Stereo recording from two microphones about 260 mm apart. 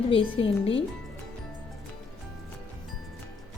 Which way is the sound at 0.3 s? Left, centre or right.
Left.